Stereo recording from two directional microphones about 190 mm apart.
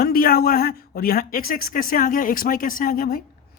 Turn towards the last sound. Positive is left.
turn(degrees=50)  # may be behind; listen again after turning